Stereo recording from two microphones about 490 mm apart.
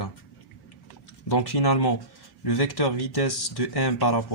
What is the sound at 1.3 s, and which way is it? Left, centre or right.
Speech, left.